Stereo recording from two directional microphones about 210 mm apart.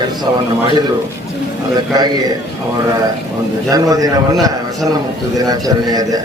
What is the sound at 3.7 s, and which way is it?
Speech, 15° right (ahead or behind).